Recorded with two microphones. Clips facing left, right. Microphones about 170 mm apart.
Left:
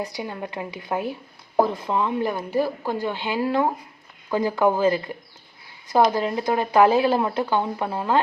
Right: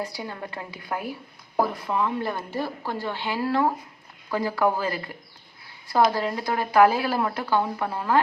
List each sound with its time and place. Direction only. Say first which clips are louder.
0.0 s speech: left 3 dB; 20° left (ahead or behind)